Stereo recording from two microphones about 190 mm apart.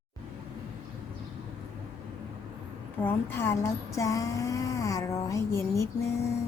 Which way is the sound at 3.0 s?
10° left (ahead or behind).